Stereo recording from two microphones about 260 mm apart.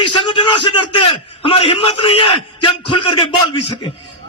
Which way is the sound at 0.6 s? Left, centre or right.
Left.